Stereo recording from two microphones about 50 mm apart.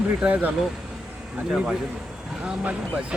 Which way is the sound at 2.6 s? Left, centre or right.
Right.